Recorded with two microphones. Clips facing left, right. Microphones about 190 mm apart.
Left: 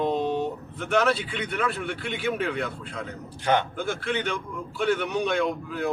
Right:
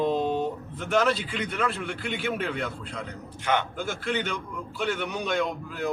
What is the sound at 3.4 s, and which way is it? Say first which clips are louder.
Speech: left 3 dB; 35° left (ahead or behind).